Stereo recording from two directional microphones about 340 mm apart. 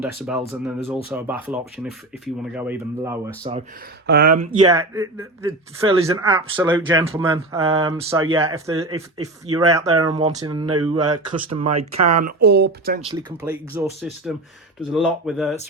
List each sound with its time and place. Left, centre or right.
0.0 s speech: centre
4.0 s speech: right
4.6 s speech: centre
11.3 s speech: right
12.0 s speech: right
13.1 s speech: centre